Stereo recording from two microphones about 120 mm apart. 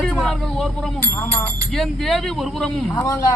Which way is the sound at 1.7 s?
5° left (ahead or behind).